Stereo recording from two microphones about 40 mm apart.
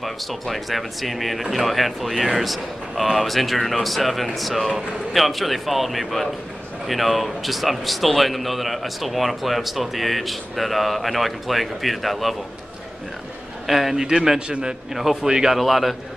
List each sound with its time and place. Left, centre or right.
0.0 s speech: centre
13.7 s a man's voice: centre
15.5 s speech: centre